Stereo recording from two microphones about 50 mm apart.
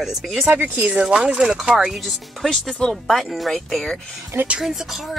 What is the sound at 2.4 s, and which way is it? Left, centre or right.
Speech, centre.